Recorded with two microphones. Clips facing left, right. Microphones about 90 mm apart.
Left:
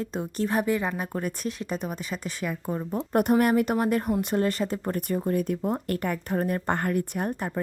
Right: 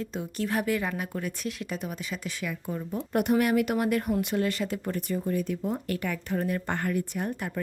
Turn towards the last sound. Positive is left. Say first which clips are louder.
# left 2 dB
turn(degrees=50)  # may be behind; listen again after turning